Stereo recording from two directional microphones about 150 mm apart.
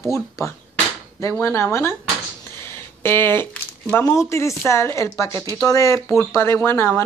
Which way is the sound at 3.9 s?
20° left (ahead or behind).